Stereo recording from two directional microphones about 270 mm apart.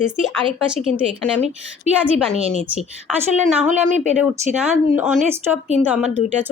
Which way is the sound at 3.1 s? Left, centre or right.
Centre.